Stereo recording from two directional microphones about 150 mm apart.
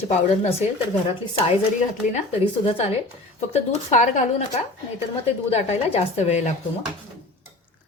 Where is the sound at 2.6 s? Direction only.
40° left (ahead or behind).